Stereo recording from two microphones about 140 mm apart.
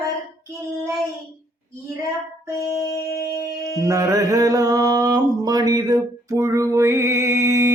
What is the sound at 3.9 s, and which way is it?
Mantra, 20° right (ahead or behind).